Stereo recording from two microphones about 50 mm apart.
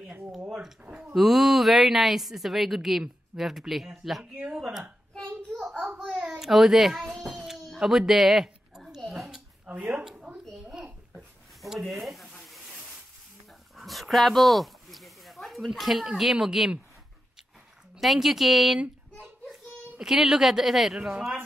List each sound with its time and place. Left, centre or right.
0.5 s a sound: centre
0.9 s a woman's voice: centre
4.2 s speech: centre
6.3 s a child's voice: centre
7.3 s a sound: centre
9.7 s speech: right
11.9 s speech: centre
12.4 s a sound: centre
13.7 s dog: centre
16.1 s a child's voice: centre
17.9 s a woman's voice: centre